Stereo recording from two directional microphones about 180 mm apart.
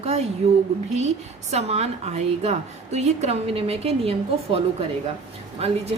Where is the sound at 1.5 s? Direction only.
35° right (ahead or behind).